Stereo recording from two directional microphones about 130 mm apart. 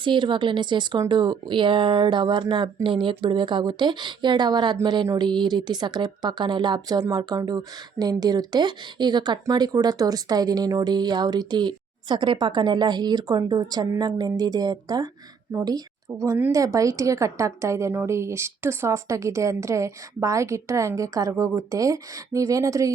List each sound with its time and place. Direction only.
0.0 s a woman's voice: 40° right (ahead or behind)